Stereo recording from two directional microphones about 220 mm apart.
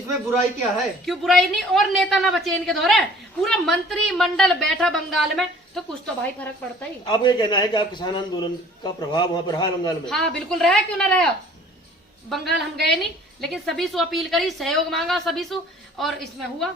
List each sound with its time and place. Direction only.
1.0 s a woman's voice: centre (ahead or behind)
7.0 s a man's voice: 20° left (ahead or behind)
10.1 s a woman's voice: centre (ahead or behind)
12.3 s a woman's voice: centre (ahead or behind)